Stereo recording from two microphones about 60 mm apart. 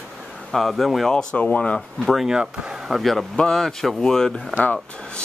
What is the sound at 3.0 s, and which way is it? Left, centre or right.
Speech, centre.